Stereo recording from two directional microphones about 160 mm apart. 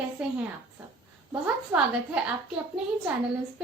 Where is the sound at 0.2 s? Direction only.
5° right (ahead or behind).